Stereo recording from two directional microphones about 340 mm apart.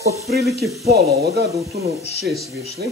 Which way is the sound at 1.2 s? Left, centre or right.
Right.